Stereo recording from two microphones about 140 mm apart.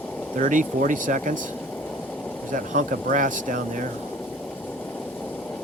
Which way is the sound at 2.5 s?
70° right (ahead or behind).